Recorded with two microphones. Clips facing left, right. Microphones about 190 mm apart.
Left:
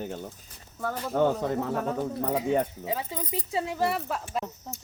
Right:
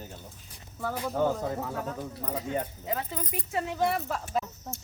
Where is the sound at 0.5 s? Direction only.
10° right (ahead or behind).